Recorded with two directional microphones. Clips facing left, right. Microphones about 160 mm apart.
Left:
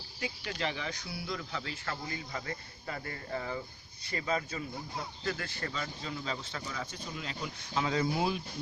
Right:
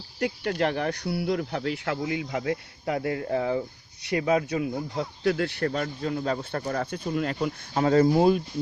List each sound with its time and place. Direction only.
0.2 s speech: 60° right (ahead or behind)